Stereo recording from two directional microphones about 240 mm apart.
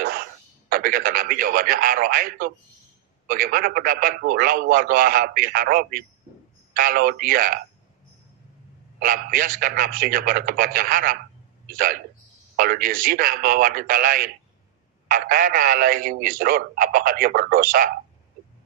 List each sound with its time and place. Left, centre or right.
0.0 s radio: right
3.3 s a man's voice: right
9.0 s a man's voice: right